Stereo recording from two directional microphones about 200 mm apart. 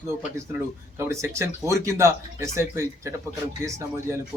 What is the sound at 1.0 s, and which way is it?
Speech, 15° right (ahead or behind).